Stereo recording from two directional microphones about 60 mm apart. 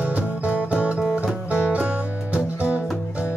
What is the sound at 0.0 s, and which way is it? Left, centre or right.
Music, right.